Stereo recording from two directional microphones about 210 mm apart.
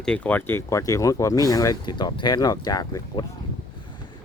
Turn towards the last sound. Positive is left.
turn(degrees=20)  # may be behind; listen again after turning